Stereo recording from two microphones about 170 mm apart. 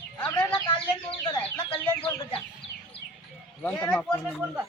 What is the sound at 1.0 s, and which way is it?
Speech, 25° left (ahead or behind).